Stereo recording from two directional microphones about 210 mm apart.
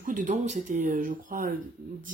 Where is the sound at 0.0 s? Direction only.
40° right (ahead or behind).